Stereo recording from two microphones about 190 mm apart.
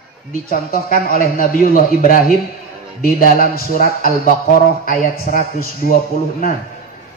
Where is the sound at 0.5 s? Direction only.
50° left (ahead or behind).